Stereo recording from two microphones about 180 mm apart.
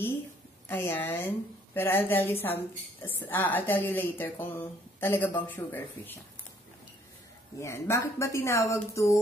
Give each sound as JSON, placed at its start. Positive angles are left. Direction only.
{"t": 0.7, "sound": "a woman's voice", "side_deg": 10}
{"t": 7.6, "sound": "a woman's voice", "side_deg": 15}